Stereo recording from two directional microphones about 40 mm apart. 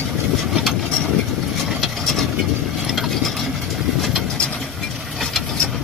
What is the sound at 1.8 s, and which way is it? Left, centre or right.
Vehicle, centre.